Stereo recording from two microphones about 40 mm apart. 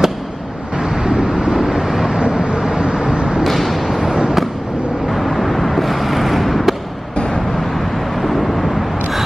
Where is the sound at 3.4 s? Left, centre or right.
Centre.